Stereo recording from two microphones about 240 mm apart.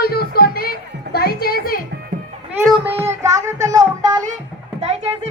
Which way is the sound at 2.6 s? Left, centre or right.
Centre.